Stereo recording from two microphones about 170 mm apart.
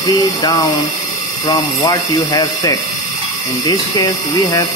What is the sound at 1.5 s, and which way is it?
Speech, 20° left (ahead or behind).